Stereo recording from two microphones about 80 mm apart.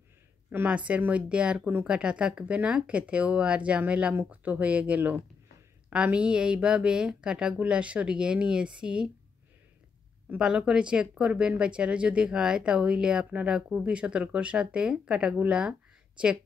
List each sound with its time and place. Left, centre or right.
0.5 s speech: right
10.4 s speech: centre